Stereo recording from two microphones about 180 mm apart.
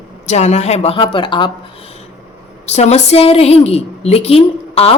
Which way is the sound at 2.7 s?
35° left (ahead or behind).